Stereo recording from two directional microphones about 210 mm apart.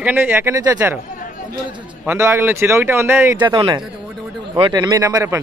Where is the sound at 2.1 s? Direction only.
10° right (ahead or behind).